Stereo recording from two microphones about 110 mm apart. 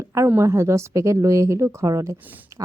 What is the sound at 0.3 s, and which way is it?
Speech, 25° right (ahead or behind).